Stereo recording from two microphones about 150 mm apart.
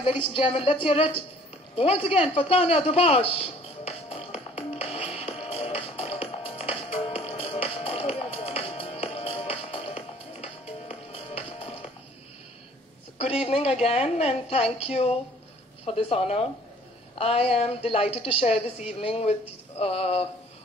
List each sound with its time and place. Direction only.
0.0 s a woman's voice: 35° left (ahead or behind)
1.8 s a sound: 40° left (ahead or behind)
13.2 s a woman's voice: 40° left (ahead or behind)